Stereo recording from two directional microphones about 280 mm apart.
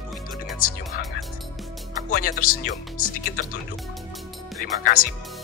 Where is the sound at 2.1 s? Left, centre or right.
Left.